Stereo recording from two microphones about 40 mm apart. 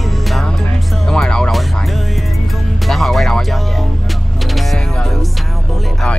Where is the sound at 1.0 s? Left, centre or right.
Centre.